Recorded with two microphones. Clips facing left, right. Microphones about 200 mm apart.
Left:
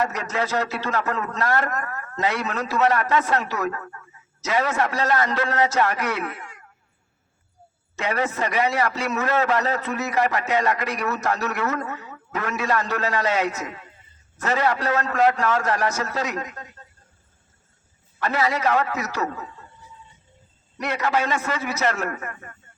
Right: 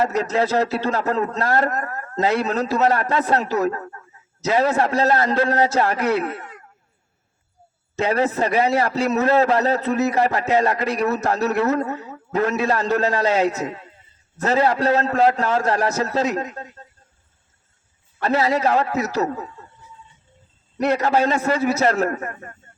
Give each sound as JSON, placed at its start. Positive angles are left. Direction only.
{"t": 0.0, "sound": "a man's voice", "side_deg": -35}
{"t": 7.9, "sound": "a man's voice", "side_deg": -30}
{"t": 18.2, "sound": "a man's voice", "side_deg": -35}
{"t": 20.8, "sound": "a man's voice", "side_deg": -35}